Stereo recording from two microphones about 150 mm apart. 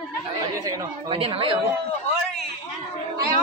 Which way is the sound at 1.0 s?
40° right (ahead or behind).